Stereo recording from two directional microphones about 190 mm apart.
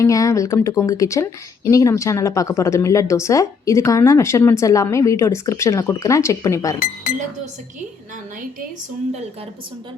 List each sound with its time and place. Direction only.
0.0 s speech: 15° left (ahead or behind)